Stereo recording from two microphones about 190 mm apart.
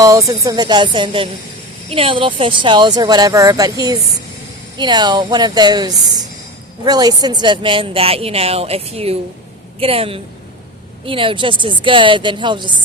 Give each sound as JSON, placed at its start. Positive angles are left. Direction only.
{"t": 0.0, "sound": "a woman's voice", "side_deg": -15}